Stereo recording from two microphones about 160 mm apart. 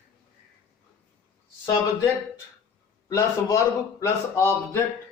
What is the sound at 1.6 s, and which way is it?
Speech, 20° left (ahead or behind).